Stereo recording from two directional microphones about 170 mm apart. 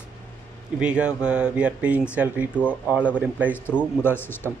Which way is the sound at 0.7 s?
5° right (ahead or behind).